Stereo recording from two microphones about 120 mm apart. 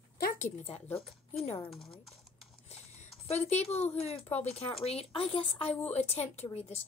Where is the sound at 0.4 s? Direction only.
60° left (ahead or behind).